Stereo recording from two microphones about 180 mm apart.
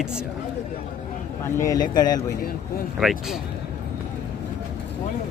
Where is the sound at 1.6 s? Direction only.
20° left (ahead or behind).